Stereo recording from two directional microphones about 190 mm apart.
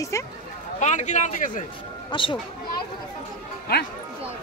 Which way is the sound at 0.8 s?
40° left (ahead or behind).